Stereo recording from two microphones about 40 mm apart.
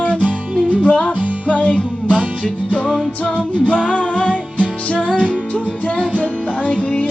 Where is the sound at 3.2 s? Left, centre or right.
Left.